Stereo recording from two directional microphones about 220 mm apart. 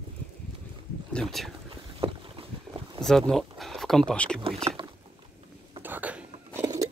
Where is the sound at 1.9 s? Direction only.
25° right (ahead or behind).